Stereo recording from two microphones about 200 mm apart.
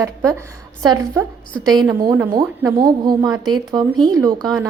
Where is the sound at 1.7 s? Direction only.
15° right (ahead or behind).